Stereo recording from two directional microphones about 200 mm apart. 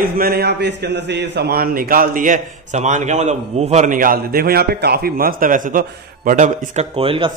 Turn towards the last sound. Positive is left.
turn(degrees=-25)  # may be behind; listen again after turning